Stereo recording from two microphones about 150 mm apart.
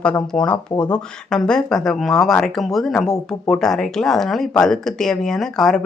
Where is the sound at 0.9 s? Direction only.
5° left (ahead or behind).